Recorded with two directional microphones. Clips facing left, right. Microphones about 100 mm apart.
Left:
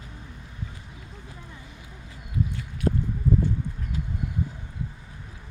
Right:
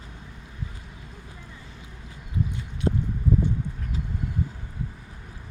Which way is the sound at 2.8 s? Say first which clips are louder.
Even; 25° right (ahead or behind).